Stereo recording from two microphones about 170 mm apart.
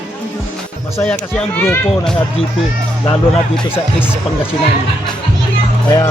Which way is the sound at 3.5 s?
10° left (ahead or behind).